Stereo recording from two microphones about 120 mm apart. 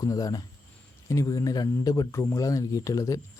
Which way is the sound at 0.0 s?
30° left (ahead or behind).